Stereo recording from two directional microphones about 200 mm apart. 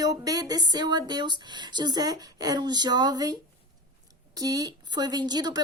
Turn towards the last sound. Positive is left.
turn(degrees=-20)  # may be behind; listen again after turning